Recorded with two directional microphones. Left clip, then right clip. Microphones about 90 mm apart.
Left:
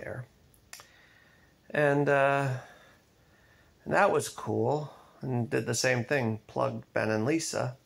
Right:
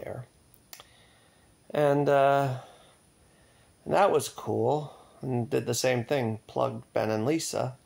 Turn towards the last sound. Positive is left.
turn(degrees=-30)  # may be behind; listen again after turning